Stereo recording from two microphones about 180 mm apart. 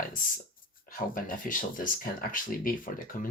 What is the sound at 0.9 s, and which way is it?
Speech, 50° left (ahead or behind).